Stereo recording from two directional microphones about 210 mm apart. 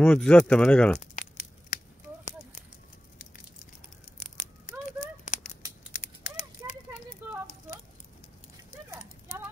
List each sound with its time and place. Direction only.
0.0 s speech: 5° left (ahead or behind)
1.1 s tearing: 40° left (ahead or behind)
5.2 s a sound: 35° left (ahead or behind)
5.9 s mechanisms: 35° left (ahead or behind)